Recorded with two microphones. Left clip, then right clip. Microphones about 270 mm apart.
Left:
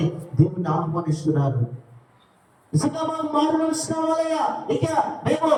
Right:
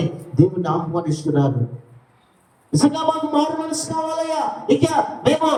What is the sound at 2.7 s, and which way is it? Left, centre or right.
A man's voice, right.